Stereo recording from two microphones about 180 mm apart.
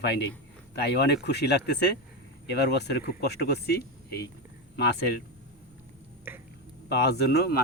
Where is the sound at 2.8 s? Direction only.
65° left (ahead or behind).